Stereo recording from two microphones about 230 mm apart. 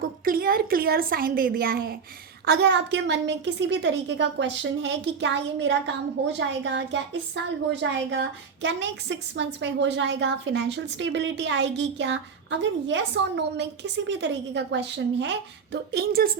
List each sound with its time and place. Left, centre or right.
0.3 s a woman's voice: right